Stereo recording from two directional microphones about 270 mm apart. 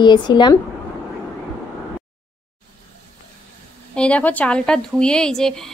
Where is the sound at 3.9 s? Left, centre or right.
Centre.